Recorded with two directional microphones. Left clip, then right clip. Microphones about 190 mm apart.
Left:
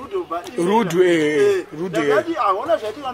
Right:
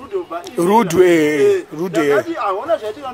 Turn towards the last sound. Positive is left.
turn(degrees=0)  # may be behind; listen again after turning